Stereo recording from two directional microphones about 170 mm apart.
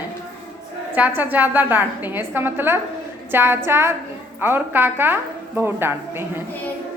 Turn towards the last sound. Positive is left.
turn(degrees=-15)  # may be behind; listen again after turning